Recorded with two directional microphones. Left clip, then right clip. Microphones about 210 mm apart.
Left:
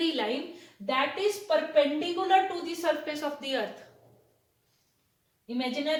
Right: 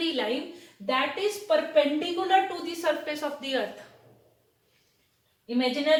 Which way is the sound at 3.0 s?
25° left (ahead or behind).